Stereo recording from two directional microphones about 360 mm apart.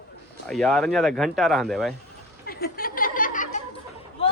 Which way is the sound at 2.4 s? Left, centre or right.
Left.